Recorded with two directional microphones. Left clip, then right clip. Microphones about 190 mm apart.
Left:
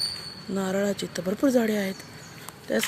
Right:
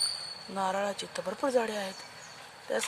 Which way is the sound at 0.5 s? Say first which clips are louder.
Left 4 dB; 5° right (ahead or behind).